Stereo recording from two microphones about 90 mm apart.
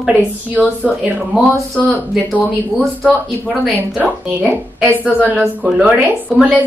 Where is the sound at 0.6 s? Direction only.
15° left (ahead or behind).